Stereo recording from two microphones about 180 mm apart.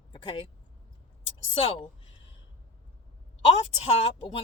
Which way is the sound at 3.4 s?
35° left (ahead or behind).